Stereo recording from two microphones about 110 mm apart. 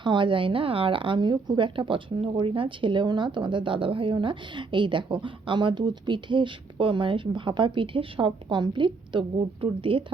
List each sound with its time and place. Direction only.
0.0 s speech: 45° right (ahead or behind)